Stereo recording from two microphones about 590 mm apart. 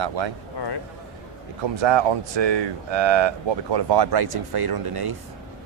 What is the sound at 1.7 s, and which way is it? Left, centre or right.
Speech, right.